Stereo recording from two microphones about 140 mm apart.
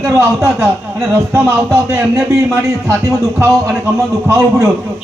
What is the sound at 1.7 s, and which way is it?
A man's voice, 20° right (ahead or behind).